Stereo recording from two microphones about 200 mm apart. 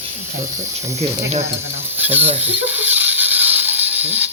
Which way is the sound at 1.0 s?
30° right (ahead or behind).